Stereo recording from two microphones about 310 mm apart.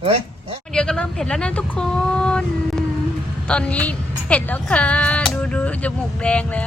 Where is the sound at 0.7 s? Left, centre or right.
Centre.